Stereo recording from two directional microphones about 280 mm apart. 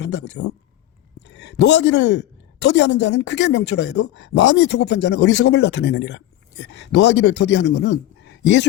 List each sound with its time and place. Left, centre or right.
0.0 s speech: left